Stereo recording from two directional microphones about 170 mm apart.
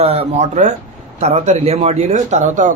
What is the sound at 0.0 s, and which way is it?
Speech, 35° right (ahead or behind).